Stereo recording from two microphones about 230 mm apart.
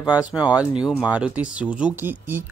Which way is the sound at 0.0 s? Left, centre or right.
Centre.